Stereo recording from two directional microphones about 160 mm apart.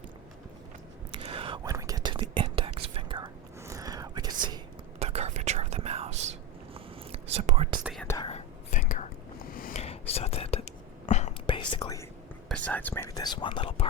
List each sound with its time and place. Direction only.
1.1 s whispering: 35° right (ahead or behind)
3.6 s whispering: 20° right (ahead or behind)
4.9 s whispering: 40° right (ahead or behind)
7.3 s whispering: 40° right (ahead or behind)
8.2 s whispering: 40° left (ahead or behind)
8.9 s whispering: 60° left (ahead or behind)
9.7 s whispering: 40° left (ahead or behind)
11.4 s whispering: 30° left (ahead or behind)
12.5 s whispering: 10° left (ahead or behind); by 13.8 s 35° left (ahead or behind)